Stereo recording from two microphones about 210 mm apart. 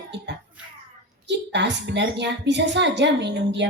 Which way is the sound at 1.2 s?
55° right (ahead or behind).